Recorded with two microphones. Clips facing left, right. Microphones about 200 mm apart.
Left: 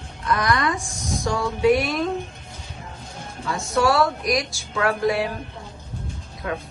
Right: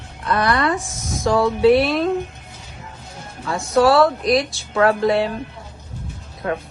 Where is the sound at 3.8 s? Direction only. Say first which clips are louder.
Right 6 dB; 35° right (ahead or behind).